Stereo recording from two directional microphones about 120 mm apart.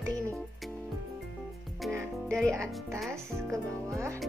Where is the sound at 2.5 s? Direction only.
25° right (ahead or behind).